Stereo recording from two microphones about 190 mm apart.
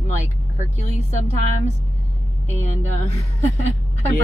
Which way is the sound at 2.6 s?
35° left (ahead or behind).